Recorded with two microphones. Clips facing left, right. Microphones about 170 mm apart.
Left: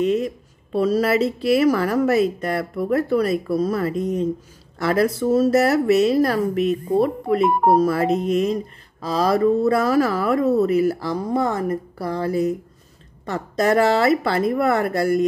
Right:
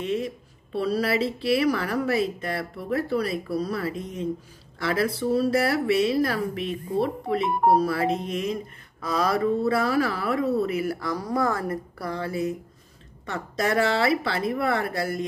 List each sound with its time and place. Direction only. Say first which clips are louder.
0.0 s a sound: left 7 dB; 40° left (ahead or behind)
0.7 s speech: left 6 dB; 45° left (ahead or behind)
9.6 s speech: left 5 dB; 45° left (ahead or behind)